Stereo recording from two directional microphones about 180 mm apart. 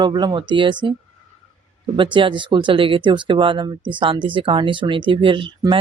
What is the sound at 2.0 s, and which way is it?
Speech, 25° right (ahead or behind).